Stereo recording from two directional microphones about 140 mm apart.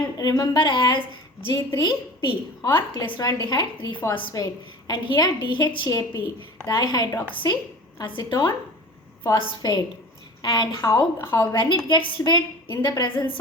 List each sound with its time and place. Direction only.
0.2 s a woman's voice: 25° left (ahead or behind)